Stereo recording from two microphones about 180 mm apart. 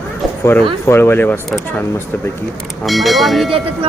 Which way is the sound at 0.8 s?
15° left (ahead or behind).